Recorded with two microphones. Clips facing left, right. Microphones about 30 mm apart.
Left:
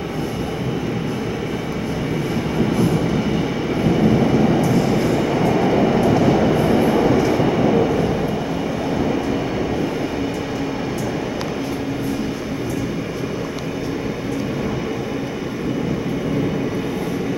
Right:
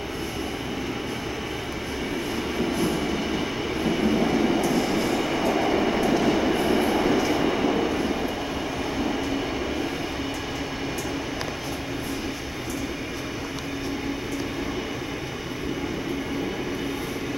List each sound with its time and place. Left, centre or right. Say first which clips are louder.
5.3 s train: left 5 dB; centre